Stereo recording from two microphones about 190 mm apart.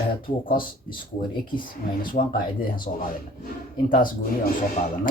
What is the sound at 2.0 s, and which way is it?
Speech, 45° left (ahead or behind).